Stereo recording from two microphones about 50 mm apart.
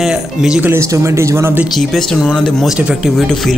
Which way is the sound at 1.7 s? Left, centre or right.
Centre.